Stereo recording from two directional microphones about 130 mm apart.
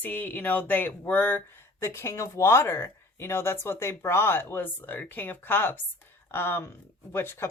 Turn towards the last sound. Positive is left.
turn(degrees=15)  # may be behind; listen again after turning